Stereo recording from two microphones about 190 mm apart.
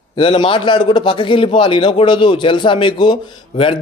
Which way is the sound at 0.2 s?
25° left (ahead or behind).